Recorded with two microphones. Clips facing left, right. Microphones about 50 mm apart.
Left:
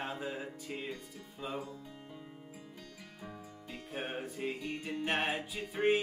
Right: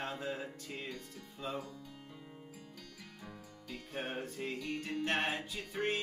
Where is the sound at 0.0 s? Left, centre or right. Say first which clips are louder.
Left 1 dB; centre.